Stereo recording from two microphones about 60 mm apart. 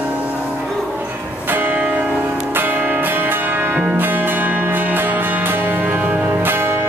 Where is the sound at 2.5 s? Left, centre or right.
Right.